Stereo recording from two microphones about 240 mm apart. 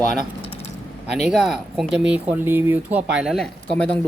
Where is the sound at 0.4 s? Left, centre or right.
Left.